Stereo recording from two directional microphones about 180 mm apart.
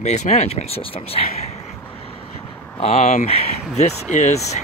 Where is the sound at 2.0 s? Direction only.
30° left (ahead or behind).